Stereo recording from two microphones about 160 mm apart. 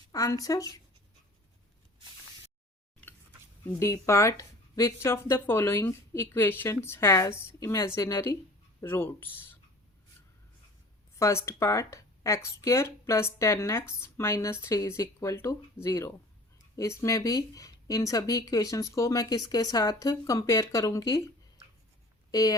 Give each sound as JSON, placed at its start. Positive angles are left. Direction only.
{"t": 0.1, "sound": "speech", "side_deg": 20}
{"t": 3.7, "sound": "speech", "side_deg": 20}
{"t": 11.2, "sound": "speech", "side_deg": 15}
{"t": 22.3, "sound": "speech", "side_deg": 20}